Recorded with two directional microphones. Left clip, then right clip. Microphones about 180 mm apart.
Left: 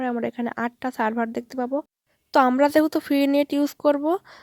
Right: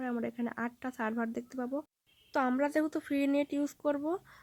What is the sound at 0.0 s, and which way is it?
Speech, 40° left (ahead or behind).